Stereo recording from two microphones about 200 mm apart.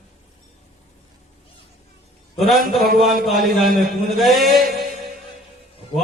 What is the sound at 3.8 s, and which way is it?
Mantra, centre (ahead or behind).